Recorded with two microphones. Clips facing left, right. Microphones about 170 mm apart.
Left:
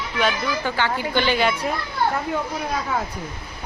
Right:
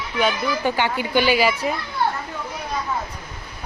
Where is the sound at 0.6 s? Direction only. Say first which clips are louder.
Right 3 dB; 15° right (ahead or behind).